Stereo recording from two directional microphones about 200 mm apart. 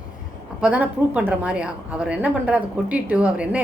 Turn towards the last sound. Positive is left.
turn(degrees=-5)  # may be behind; listen again after turning